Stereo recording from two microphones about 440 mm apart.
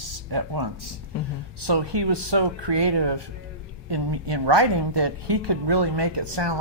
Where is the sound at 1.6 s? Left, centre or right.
Right.